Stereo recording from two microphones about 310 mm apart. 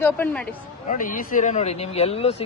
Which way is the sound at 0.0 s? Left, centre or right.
Centre.